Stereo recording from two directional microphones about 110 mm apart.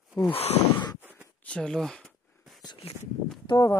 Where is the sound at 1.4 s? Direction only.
10° left (ahead or behind).